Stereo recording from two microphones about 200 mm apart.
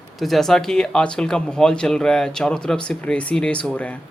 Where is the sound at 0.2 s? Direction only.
Centre (ahead or behind).